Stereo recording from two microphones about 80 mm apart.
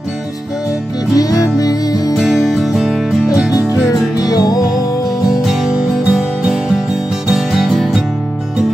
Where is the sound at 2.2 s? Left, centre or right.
Centre.